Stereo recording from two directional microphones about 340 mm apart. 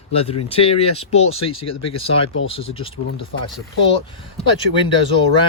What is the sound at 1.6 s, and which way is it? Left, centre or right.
Speech, left.